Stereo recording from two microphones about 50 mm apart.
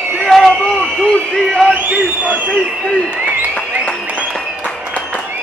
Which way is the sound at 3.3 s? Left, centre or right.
Left.